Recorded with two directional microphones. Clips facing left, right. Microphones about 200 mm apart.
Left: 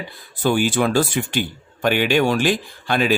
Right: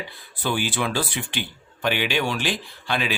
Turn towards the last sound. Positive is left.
turn(degrees=45)  # may be behind; listen again after turning